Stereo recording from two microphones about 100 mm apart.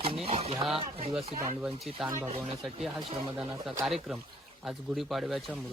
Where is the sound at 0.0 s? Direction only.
80° right.